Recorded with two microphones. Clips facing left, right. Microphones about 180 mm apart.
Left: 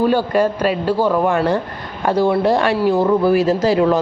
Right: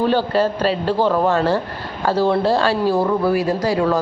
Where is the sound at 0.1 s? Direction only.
10° left (ahead or behind).